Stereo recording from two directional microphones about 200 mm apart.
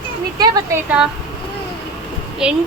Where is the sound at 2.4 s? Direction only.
5° right (ahead or behind).